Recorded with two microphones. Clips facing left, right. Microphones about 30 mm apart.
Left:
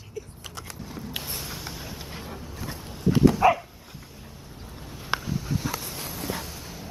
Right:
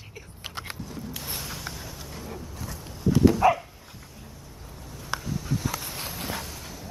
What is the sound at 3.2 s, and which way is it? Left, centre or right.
Dog, centre.